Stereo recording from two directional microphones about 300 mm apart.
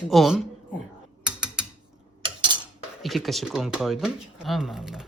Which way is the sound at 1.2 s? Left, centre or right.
Centre.